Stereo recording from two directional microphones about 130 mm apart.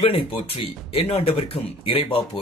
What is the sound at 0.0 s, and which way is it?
Speech, 40° left (ahead or behind).